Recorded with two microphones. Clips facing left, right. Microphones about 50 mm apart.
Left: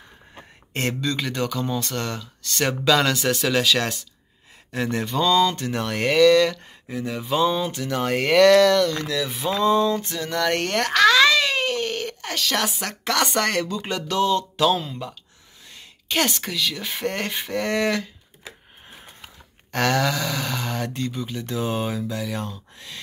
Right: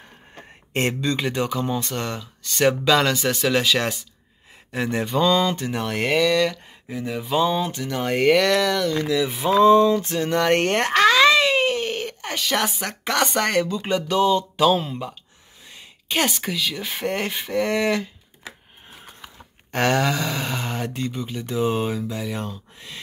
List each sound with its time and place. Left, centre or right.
0.7 s speech: right
9.4 s a sound: right
12.7 s speech: centre
14.9 s a sound: right
15.7 s speech: centre
19.7 s speech: centre